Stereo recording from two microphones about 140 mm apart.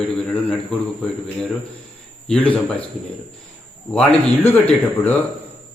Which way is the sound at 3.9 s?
5° left (ahead or behind).